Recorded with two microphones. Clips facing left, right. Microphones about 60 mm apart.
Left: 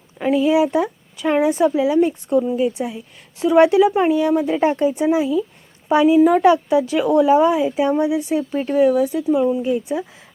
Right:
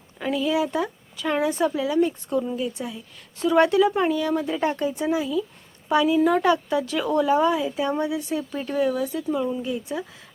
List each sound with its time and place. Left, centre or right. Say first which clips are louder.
0.2 s a woman's voice: left 7 dB; left